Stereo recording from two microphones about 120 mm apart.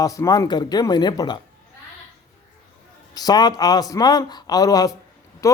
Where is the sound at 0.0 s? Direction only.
30° left (ahead or behind).